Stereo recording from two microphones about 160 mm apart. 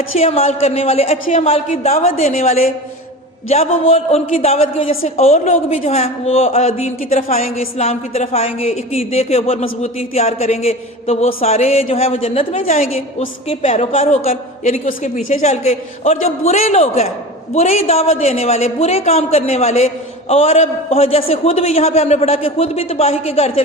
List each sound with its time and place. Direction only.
0.2 s a woman's voice: 40° left (ahead or behind)
7.6 s speech: 40° left (ahead or behind)